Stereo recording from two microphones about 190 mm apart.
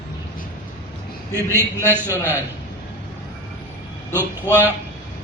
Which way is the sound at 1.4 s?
10° right (ahead or behind).